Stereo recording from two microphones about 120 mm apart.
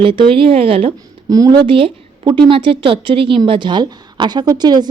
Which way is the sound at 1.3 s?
30° right (ahead or behind).